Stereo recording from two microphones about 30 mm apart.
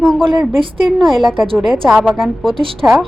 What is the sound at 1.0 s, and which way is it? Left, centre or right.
A woman's voice, centre.